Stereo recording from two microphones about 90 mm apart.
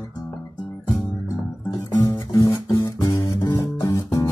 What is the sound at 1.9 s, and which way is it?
Music, 40° left (ahead or behind).